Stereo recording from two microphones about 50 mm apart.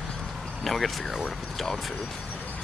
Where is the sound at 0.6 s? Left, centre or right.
Centre.